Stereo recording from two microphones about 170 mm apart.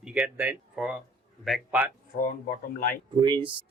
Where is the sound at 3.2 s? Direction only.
30° right (ahead or behind).